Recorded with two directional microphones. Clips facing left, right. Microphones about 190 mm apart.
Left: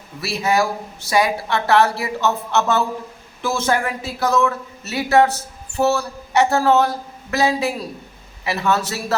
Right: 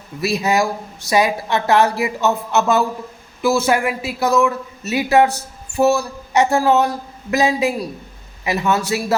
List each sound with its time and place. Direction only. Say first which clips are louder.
0.2 s a man's voice: right 2 dB; 20° right (ahead or behind)